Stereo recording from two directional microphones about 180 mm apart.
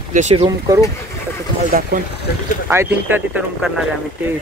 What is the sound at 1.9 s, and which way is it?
Speech, 50° right (ahead or behind).